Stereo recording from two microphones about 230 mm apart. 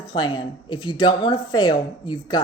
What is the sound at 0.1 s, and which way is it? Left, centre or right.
Speech, centre.